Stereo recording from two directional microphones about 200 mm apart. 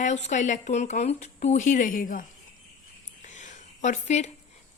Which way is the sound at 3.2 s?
40° left (ahead or behind).